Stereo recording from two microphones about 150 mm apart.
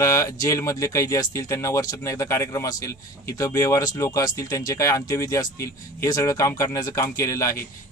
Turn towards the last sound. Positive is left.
turn(degrees=20)  # may be behind; listen again after turning